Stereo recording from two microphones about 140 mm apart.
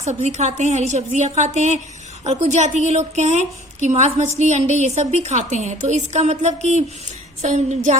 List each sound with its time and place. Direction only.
0.0 s a woman's voice: 55° right (ahead or behind)